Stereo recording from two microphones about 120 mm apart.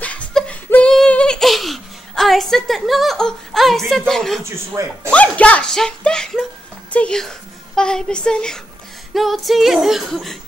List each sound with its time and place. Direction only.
0.0 s a sound: 5° left (ahead or behind)
0.7 s singing: 15° left (ahead or behind)
0.9 s baby laughter: 10° left (ahead or behind)
4.1 s speech: 5° left (ahead or behind)
4.5 s speech: 25° right (ahead or behind)
5.1 s speech: 10° left (ahead or behind)